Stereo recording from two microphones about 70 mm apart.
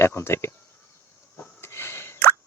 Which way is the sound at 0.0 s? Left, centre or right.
Left.